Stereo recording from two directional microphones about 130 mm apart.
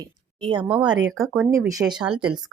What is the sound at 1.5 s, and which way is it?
Speech, 25° right (ahead or behind).